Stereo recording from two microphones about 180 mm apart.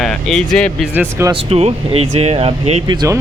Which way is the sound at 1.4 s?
35° right (ahead or behind).